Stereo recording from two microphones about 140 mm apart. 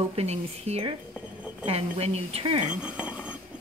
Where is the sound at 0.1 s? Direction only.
50° right (ahead or behind).